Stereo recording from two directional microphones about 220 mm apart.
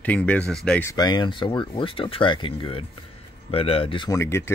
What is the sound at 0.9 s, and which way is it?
Speech, 20° left (ahead or behind).